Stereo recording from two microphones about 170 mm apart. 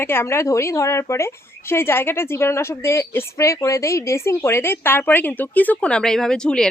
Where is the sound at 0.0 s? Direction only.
15° left (ahead or behind).